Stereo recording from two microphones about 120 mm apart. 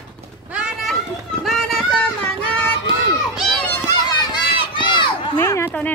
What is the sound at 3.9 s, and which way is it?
Run, 40° left (ahead or behind).